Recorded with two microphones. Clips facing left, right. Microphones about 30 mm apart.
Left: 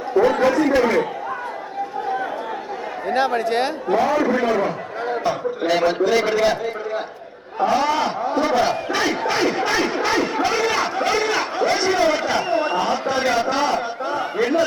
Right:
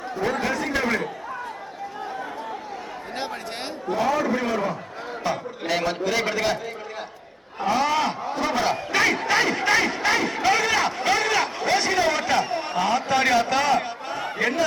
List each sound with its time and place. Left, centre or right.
0.1 s speech: left
0.7 s speech: centre
3.2 s speech: left
4.0 s speech: centre
4.3 s speech: left; by 6.6 s centre
7.6 s speech: centre; by 12.7 s left
12.7 s speech: centre